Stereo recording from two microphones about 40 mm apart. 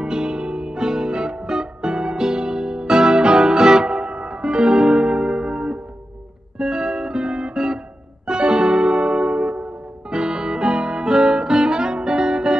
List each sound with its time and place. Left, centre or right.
0.0 s music: centre